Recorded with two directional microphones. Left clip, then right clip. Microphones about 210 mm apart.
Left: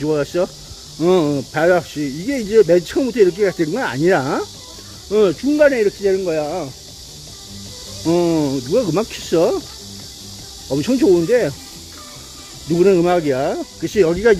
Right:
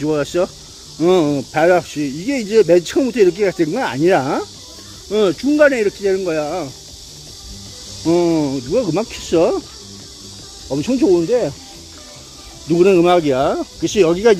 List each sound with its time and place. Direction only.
0.0 s speech: 15° right (ahead or behind)
8.0 s speech: 10° right (ahead or behind)
10.7 s speech: centre (ahead or behind)
12.7 s speech: 15° right (ahead or behind)